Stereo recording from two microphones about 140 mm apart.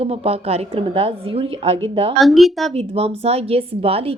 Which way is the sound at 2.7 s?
45° right (ahead or behind).